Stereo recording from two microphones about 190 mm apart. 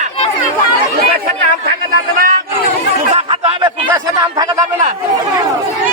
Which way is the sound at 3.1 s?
35° right (ahead or behind).